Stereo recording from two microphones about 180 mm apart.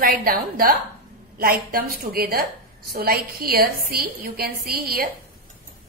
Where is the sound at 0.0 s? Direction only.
55° right (ahead or behind).